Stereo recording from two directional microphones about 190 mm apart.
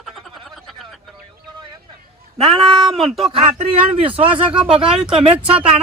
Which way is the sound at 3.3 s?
30° right (ahead or behind).